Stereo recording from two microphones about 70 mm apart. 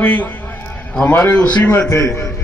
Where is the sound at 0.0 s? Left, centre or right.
Left.